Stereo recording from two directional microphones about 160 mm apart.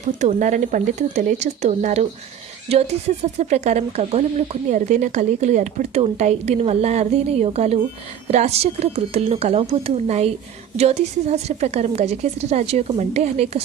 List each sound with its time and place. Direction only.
0.2 s a woman's voice: 50° right (ahead or behind)